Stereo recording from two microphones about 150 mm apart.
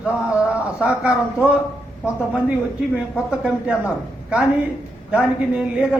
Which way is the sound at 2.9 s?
10° right (ahead or behind).